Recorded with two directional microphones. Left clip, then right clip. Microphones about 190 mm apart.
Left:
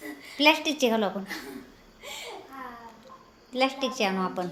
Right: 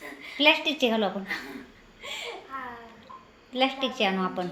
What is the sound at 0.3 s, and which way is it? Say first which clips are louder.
Speech: even; 10° left (ahead or behind).